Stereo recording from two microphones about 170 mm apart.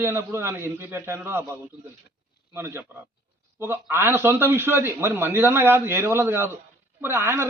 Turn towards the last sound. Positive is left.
turn(degrees=-15)  # may be behind; listen again after turning